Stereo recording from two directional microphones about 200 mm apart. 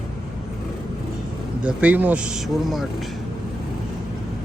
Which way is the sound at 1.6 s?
5° right (ahead or behind).